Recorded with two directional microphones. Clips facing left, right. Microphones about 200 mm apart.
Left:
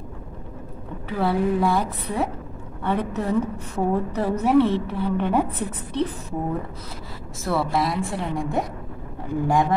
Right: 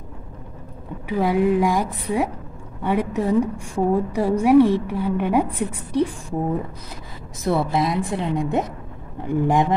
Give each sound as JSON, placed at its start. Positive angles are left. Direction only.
{"t": 1.0, "sound": "a woman's voice", "side_deg": -15}
{"t": 7.4, "sound": "a woman's voice", "side_deg": -20}